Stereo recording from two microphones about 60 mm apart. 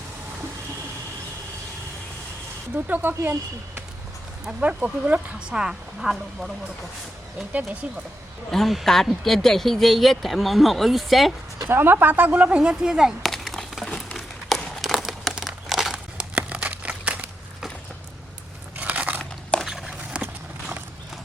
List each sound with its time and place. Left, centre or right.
2.7 s speech: right
4.6 s speech: right; by 6.5 s centre
8.4 s speech: centre
11.7 s speech: right; by 13.1 s centre
13.2 s crumpling: centre
14.8 s crumpling: centre
16.1 s a sound: right
18.8 s biting: right
19.6 s a sound: centre